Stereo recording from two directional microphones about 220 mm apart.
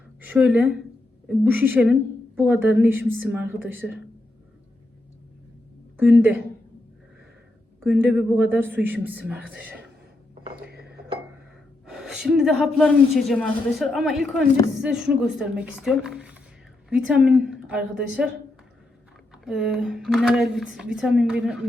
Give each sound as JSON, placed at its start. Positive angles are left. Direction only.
{"t": 0.2, "sound": "a woman's voice", "side_deg": -5}
{"t": 6.0, "sound": "a woman's voice", "side_deg": -10}
{"t": 7.9, "sound": "a woman's voice", "side_deg": -10}
{"t": 10.6, "sound": "chink", "side_deg": -45}
{"t": 11.9, "sound": "a woman's voice", "side_deg": 0}
{"t": 19.3, "sound": "a woman's voice", "side_deg": -5}